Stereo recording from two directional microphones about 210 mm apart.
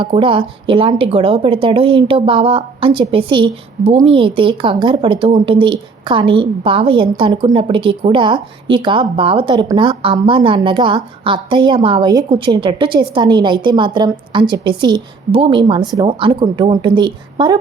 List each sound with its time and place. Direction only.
0.0 s speech: 25° right (ahead or behind)